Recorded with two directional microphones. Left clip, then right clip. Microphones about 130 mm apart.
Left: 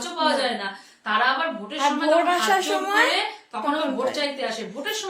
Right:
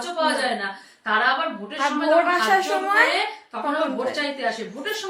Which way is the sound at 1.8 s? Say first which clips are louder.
Right 1 dB; 15° left (ahead or behind).